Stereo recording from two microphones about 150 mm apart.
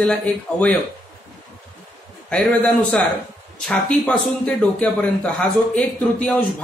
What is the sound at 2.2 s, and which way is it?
A man's voice, 5° left (ahead or behind).